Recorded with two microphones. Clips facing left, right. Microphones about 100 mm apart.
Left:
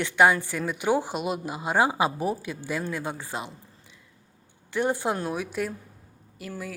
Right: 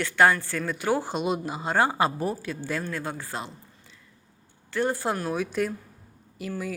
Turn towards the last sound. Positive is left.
turn(degrees=0)  # may be behind; listen again after turning